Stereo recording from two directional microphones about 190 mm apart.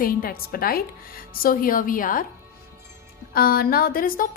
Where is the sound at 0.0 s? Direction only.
50° left (ahead or behind).